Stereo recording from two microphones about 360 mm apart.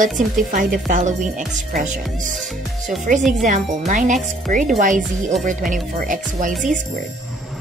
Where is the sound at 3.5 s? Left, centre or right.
Right.